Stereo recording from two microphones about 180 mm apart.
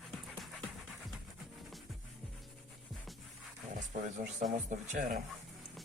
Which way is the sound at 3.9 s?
40° right (ahead or behind).